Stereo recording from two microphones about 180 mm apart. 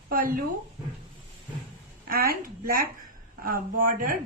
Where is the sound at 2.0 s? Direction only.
55° right (ahead or behind).